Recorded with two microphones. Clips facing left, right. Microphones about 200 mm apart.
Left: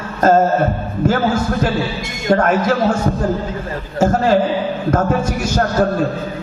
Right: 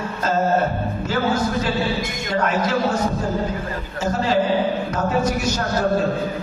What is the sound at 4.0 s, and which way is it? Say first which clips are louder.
Speech: left 7 dB; 45° left (ahead or behind).